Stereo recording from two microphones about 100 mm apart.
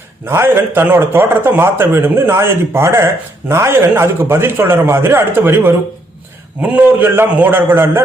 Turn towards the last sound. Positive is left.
turn(degrees=-20)  # may be behind; listen again after turning